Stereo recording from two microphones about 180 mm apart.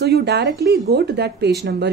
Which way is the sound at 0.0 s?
65° right (ahead or behind).